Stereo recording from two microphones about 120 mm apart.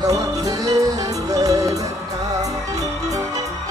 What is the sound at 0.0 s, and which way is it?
Music, 30° right (ahead or behind).